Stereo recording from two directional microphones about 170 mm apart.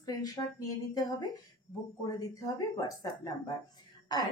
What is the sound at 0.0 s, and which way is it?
A woman's voice, 20° left (ahead or behind).